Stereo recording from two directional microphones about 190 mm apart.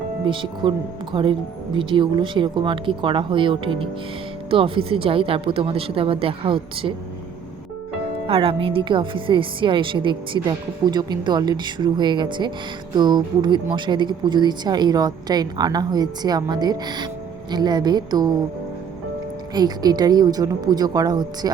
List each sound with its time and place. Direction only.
0.3 s a woman's voice: 25° right (ahead or behind)
8.3 s a woman's voice: 30° right (ahead or behind)
19.5 s a woman's voice: 20° right (ahead or behind)